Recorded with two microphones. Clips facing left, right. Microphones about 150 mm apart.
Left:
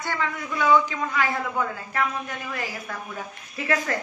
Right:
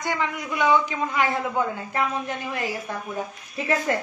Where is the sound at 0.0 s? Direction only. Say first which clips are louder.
Right 2 dB; 15° right (ahead or behind).